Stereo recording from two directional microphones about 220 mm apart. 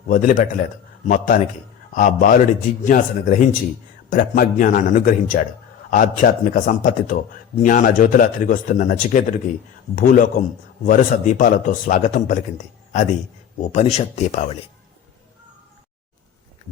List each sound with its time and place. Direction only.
0.1 s a man's voice: 40° left (ahead or behind)